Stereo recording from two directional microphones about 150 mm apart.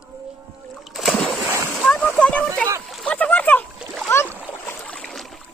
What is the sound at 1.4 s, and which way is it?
Splash, 15° right (ahead or behind).